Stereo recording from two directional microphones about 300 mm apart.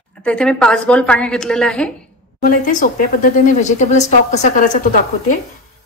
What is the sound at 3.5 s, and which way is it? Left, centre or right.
A woman's voice, left.